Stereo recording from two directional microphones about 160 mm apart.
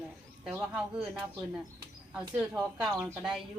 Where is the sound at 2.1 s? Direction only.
10° right (ahead or behind).